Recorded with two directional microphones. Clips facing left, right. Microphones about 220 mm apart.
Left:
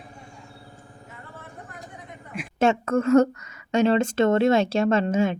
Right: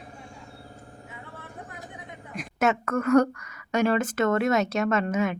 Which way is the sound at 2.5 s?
30° left (ahead or behind).